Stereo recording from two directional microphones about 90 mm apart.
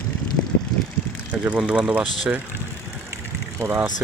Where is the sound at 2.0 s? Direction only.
Centre (ahead or behind).